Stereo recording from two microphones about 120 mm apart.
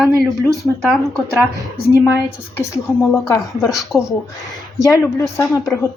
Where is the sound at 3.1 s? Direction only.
25° left (ahead or behind).